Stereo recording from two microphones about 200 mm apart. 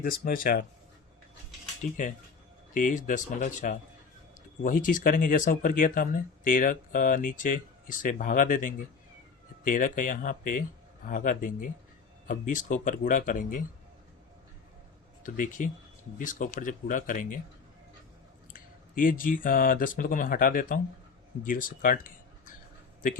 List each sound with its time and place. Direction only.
0.0 s speech: 45° left (ahead or behind)
1.8 s speech: 40° left (ahead or behind)
15.2 s speech: 40° left (ahead or behind)
18.5 s speech: 45° left (ahead or behind)